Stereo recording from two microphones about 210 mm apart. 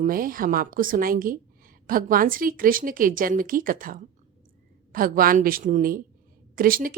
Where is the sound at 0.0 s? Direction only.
40° right (ahead or behind).